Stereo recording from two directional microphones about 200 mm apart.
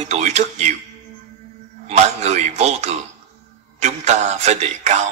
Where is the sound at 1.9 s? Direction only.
35° right (ahead or behind).